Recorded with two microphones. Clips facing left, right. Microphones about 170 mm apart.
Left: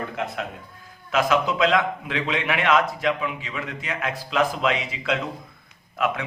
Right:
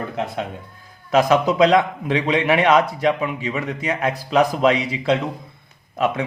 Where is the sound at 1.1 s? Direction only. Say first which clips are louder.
Right 5 dB; 40° right (ahead or behind).